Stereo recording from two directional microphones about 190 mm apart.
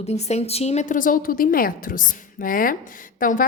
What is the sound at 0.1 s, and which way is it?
A woman's voice, 35° left (ahead or behind).